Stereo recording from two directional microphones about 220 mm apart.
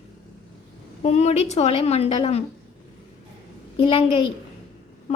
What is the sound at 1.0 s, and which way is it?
A woman's voice, 30° left (ahead or behind).